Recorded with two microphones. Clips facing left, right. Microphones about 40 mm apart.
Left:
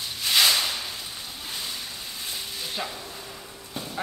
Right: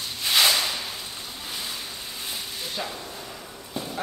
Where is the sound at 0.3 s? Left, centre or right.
Centre.